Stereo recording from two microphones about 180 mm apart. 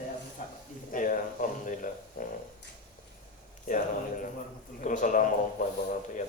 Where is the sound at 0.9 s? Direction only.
50° left (ahead or behind).